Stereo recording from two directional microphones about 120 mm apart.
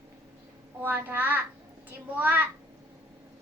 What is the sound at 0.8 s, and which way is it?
A child's voice, 15° right (ahead or behind).